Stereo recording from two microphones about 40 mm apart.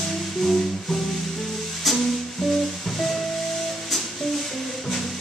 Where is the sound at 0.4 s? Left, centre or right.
Centre.